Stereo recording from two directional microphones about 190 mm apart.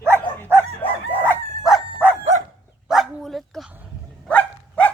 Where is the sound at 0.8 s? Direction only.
30° left (ahead or behind).